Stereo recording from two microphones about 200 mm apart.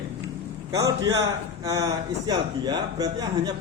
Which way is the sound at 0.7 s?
15° right (ahead or behind).